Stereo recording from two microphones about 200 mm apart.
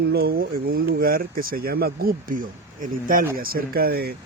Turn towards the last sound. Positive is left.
turn(degrees=-50)  # may be behind; listen again after turning